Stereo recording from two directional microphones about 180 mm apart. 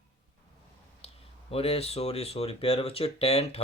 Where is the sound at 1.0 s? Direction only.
35° left (ahead or behind).